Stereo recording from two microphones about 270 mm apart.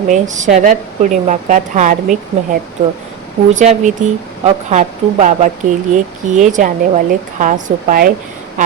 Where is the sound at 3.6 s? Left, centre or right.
Right.